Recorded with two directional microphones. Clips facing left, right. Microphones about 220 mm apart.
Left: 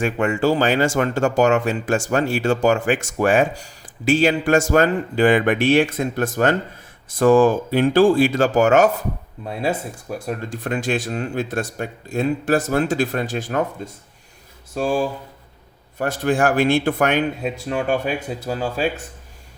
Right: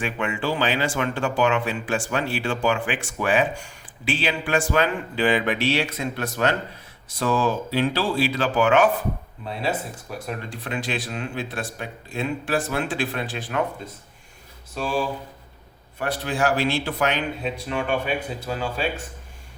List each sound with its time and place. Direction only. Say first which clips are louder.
0.0 s speech: left 7 dB; 45° left (ahead or behind)
14.8 s speech: left 5 dB; 45° left (ahead or behind)